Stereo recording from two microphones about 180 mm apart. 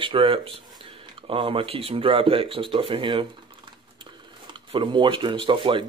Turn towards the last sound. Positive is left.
turn(degrees=-25)  # may be behind; listen again after turning